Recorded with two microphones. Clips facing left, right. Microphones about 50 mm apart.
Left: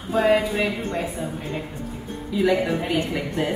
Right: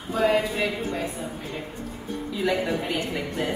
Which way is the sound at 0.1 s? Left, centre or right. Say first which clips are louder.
Left 3 dB; centre.